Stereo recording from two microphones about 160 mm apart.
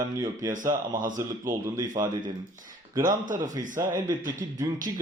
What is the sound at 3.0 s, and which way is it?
Speech, 55° right (ahead or behind).